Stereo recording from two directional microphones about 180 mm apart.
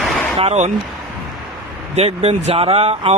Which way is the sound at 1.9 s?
35° right (ahead or behind).